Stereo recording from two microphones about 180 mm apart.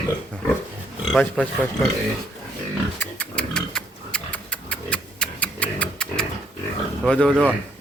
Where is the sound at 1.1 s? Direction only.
5° left (ahead or behind).